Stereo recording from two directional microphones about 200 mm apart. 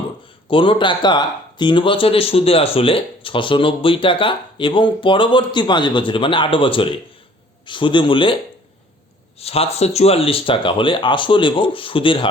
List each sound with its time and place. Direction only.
0.4 s speech: 25° left (ahead or behind)
9.4 s speech: 30° left (ahead or behind)